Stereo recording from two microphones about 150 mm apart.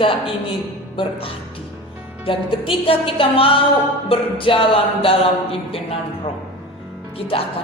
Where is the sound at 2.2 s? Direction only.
35° left (ahead or behind).